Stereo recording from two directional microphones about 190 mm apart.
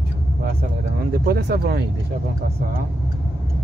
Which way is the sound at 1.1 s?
55° right (ahead or behind).